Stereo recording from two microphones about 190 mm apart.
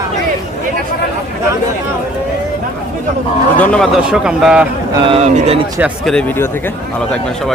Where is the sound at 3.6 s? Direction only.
5° left (ahead or behind).